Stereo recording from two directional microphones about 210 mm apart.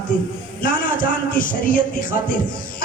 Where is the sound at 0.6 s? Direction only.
40° left (ahead or behind).